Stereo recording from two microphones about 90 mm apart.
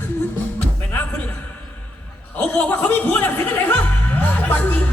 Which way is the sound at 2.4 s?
15° left (ahead or behind).